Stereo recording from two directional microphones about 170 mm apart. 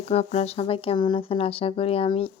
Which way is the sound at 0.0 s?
35° left (ahead or behind).